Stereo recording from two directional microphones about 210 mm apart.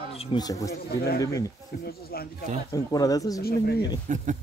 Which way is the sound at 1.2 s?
15° left (ahead or behind).